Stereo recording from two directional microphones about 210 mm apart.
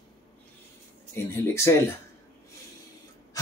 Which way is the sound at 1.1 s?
15° left (ahead or behind).